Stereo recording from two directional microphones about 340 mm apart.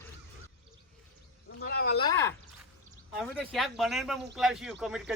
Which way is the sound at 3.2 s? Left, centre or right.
Centre.